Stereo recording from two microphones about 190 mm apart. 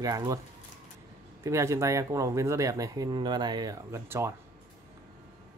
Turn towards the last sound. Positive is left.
turn(degrees=-15)  # may be behind; listen again after turning